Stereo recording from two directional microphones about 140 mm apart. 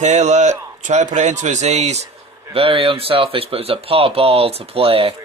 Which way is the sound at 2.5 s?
40° right (ahead or behind).